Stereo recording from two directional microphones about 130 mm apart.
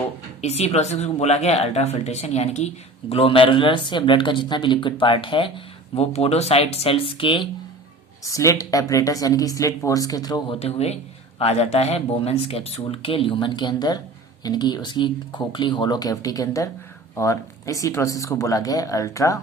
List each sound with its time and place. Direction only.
0.4 s speech: 55° left (ahead or behind)
8.2 s a woman's voice: 25° left (ahead or behind)
10.5 s a woman's voice: 50° left (ahead or behind); by 19.4 s 25° left (ahead or behind)